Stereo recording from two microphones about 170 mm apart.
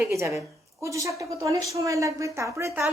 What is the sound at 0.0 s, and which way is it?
A woman's voice, 15° right (ahead or behind).